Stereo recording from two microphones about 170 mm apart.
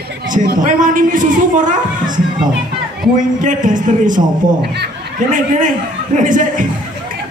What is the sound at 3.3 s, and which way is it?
Speech, 50° right (ahead or behind).